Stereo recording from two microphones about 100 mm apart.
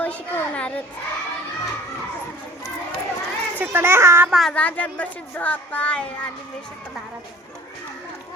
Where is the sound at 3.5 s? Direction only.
20° right (ahead or behind).